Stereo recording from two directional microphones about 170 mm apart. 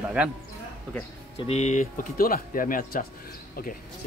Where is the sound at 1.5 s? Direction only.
45° left (ahead or behind).